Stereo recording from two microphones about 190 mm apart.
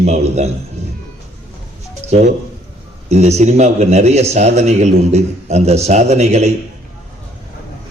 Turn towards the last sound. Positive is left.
turn(degrees=-35)  # may be behind; listen again after turning